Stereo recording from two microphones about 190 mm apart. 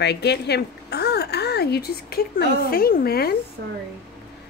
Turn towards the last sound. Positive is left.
turn(degrees=-60)  # may be behind; listen again after turning